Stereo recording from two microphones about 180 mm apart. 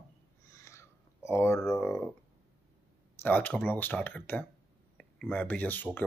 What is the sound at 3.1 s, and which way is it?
Speech, 10° left (ahead or behind).